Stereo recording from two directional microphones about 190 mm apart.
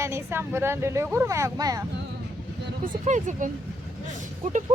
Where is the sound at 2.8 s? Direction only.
40° right (ahead or behind).